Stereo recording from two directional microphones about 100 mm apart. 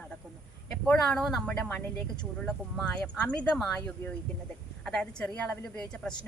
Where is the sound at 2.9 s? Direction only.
10° left (ahead or behind).